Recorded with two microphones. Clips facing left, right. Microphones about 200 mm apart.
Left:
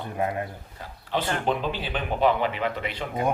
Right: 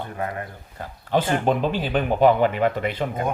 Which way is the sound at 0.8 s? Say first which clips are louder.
Right 6 dB; 45° right (ahead or behind).